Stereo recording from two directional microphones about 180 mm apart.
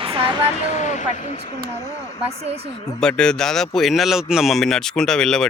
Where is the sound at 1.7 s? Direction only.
20° left (ahead or behind).